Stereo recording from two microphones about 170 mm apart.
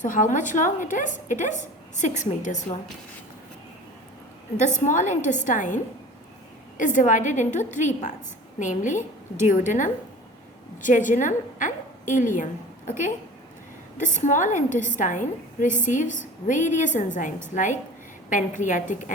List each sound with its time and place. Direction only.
0.0 s a woman's voice: 50° left (ahead or behind)
4.8 s a woman's voice: 45° left (ahead or behind)
14.0 s a woman's voice: 45° left (ahead or behind)